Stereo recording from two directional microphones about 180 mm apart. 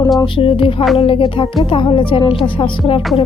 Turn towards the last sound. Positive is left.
turn(degrees=30)  # may be behind; listen again after turning